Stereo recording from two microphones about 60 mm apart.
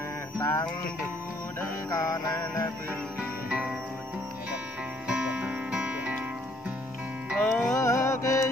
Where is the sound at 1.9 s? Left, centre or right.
Left.